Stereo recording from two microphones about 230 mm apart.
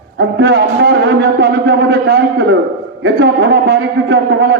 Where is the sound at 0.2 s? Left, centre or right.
Right.